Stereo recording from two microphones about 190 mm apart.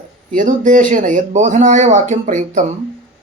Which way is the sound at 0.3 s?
40° right (ahead or behind).